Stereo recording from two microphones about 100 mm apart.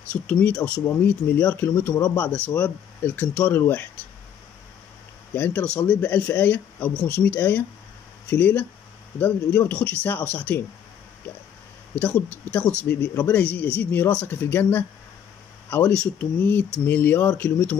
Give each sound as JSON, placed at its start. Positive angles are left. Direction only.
{"t": 0.1, "sound": "speech", "side_deg": 15}
{"t": 5.3, "sound": "speech", "side_deg": 20}
{"t": 11.9, "sound": "speech", "side_deg": 20}